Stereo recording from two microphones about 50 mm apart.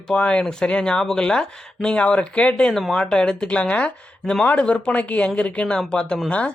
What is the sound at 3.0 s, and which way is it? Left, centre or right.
Speech, centre.